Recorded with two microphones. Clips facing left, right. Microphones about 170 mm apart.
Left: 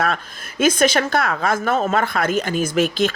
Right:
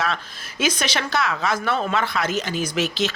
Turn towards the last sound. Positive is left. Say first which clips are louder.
# left 5 dB
turn(degrees=50)  # may be behind; listen again after turning